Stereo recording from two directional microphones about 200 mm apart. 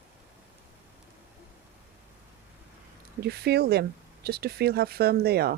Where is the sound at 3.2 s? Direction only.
55° right (ahead or behind).